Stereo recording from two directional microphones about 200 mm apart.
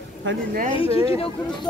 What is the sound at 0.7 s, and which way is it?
Speech, 25° left (ahead or behind).